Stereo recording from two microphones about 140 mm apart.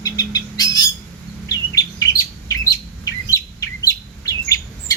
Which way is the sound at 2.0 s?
25° left (ahead or behind).